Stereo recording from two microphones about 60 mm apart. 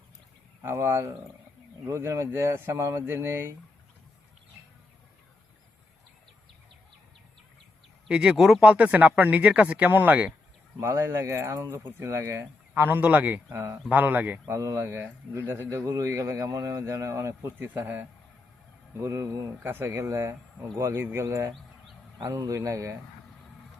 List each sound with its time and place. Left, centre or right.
0.6 s speech: right
8.0 s speech: centre
8.6 s a man's voice: right
10.8 s speech: right
12.7 s a man's voice: right
13.3 s speech: right
13.9 s speech: right
14.4 s speech: right
18.9 s speech: right
19.6 s a man's voice: right
19.9 s speech: right
21.0 s a man's voice: right
21.2 s speech: right